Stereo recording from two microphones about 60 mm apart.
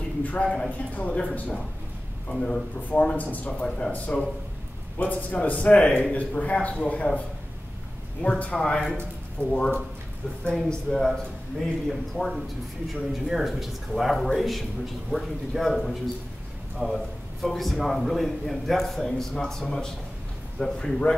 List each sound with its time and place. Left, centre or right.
0.2 s a man's voice: left
3.6 s a man's voice: centre
3.9 s a man's voice: left
8.2 s a man's voice: centre
9.4 s speech: right
10.5 s a man's voice: centre